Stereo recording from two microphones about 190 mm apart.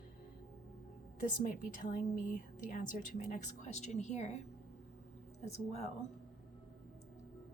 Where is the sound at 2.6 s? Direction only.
40° left (ahead or behind).